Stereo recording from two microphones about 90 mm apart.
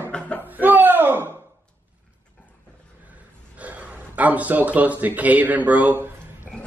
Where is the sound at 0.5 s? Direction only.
20° right (ahead or behind).